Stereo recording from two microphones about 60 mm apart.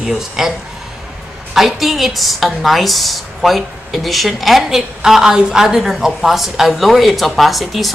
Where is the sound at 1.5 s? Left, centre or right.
Centre.